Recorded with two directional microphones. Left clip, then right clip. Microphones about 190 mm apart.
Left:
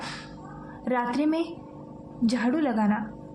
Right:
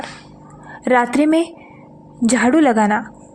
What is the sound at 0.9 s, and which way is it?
A woman's voice, 40° right (ahead or behind).